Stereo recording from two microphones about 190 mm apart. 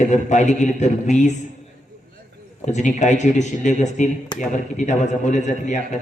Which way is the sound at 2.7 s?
40° left (ahead or behind).